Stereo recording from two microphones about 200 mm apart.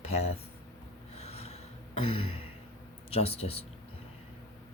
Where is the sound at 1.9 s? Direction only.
30° left (ahead or behind).